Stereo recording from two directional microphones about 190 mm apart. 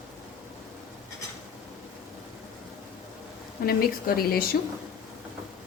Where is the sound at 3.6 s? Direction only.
55° left (ahead or behind).